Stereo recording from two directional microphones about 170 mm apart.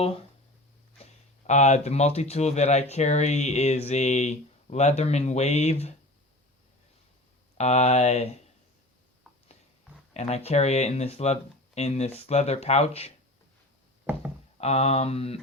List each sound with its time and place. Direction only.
1.5 s speech: 40° left (ahead or behind)
7.6 s speech: 40° left (ahead or behind)
10.2 s speech: 40° left (ahead or behind)
14.1 s speech: 10° right (ahead or behind)
14.6 s speech: 40° left (ahead or behind)